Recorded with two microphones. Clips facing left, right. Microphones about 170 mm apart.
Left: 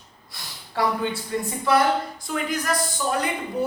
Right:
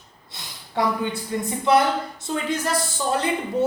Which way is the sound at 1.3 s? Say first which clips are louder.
Right 2 dB; 20° right (ahead or behind).